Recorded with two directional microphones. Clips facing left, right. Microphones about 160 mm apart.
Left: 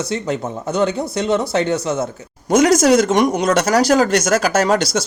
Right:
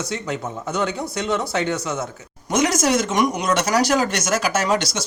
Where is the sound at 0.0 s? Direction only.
30° left (ahead or behind).